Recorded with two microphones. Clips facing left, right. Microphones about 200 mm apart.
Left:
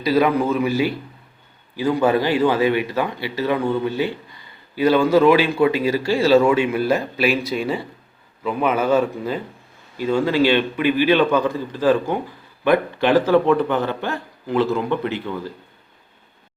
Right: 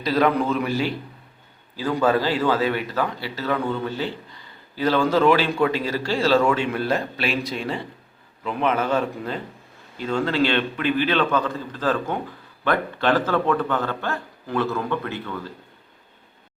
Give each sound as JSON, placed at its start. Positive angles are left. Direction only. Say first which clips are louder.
{"t": 0.0, "sound": "speech", "louder": "left 3 dB", "side_deg": 10}